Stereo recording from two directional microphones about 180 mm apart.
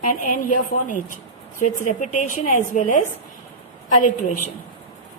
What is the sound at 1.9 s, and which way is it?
Speech, 45° left (ahead or behind).